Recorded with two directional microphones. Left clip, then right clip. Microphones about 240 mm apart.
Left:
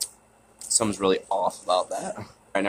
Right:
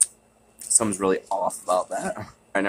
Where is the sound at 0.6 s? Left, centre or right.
Centre.